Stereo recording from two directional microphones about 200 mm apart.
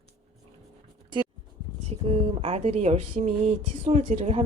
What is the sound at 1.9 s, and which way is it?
Speech, 30° right (ahead or behind).